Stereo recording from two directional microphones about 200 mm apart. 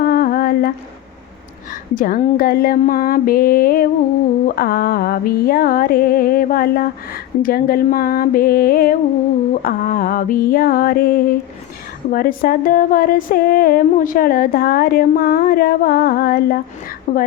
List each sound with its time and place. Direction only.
0.0 s humming: 45° left (ahead or behind)
1.7 s music: 45° left (ahead or behind)
17.1 s a woman's voice: 40° left (ahead or behind)